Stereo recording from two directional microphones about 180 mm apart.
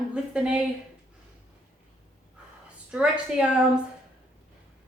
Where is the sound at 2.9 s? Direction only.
5° right (ahead or behind).